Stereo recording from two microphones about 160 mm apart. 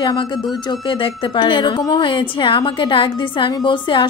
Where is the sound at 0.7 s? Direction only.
30° left (ahead or behind).